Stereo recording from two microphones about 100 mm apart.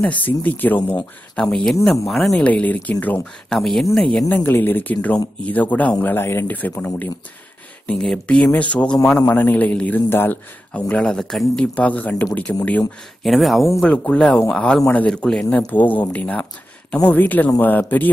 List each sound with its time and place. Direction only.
0.0 s a man's voice: 15° left (ahead or behind)
2.4 s a man's voice: 15° left (ahead or behind)
3.5 s a man's voice: centre (ahead or behind)
4.3 s a man's voice: 20° left (ahead or behind)
6.1 s a man's voice: 25° left (ahead or behind)
13.2 s speech: centre (ahead or behind)
13.7 s a man's voice: 10° left (ahead or behind)